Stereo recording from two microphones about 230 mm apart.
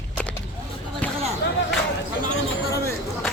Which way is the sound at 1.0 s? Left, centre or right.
Centre.